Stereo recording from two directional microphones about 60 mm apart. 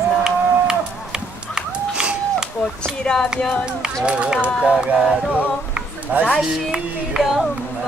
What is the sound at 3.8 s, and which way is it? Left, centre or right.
Child singing, centre.